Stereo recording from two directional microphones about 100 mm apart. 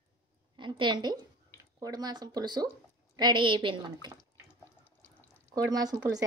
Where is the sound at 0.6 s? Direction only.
55° right (ahead or behind).